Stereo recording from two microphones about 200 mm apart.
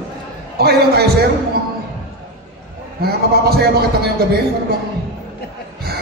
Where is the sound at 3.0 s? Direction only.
50° right (ahead or behind).